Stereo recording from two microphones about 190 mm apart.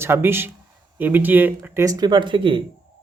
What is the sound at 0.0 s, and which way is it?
Speech, 10° right (ahead or behind).